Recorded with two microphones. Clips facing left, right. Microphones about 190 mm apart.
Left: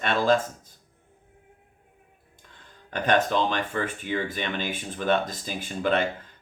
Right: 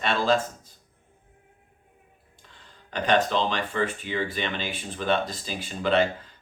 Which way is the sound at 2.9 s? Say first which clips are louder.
Even; 50° left (ahead or behind).